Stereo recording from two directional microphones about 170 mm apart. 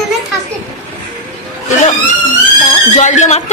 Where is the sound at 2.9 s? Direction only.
45° left (ahead or behind).